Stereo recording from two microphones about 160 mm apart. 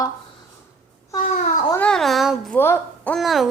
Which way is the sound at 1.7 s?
5° left (ahead or behind).